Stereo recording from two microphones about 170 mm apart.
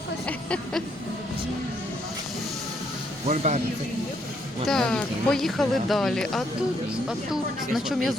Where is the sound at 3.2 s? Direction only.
40° right (ahead or behind).